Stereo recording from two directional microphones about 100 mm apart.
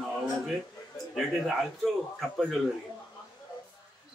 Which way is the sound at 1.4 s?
Centre (ahead or behind).